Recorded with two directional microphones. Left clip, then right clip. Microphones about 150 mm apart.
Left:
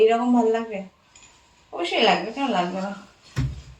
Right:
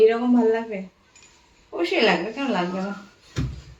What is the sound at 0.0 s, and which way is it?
Speech, 20° right (ahead or behind).